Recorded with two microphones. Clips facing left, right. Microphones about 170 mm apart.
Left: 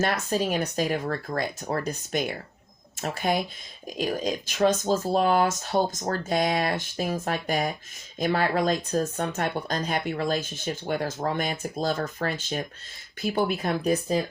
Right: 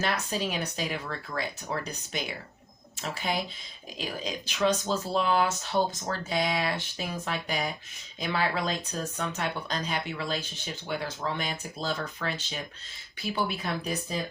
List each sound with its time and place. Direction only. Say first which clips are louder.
0.0 s speech: left 5 dB; 45° left (ahead or behind)